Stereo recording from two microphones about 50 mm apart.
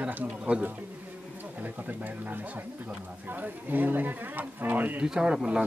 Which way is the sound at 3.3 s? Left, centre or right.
Right.